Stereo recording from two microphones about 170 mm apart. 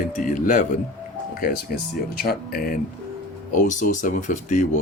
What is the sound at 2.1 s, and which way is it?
Speech, 60° left (ahead or behind).